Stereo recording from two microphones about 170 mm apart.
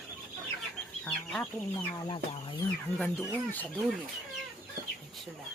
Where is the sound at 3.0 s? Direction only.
10° left (ahead or behind).